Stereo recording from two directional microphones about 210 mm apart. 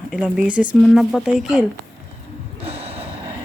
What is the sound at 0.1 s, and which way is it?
Speech, 5° right (ahead or behind).